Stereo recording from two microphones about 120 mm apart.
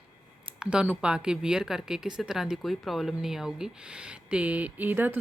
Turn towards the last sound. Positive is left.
turn(degrees=-15)  # may be behind; listen again after turning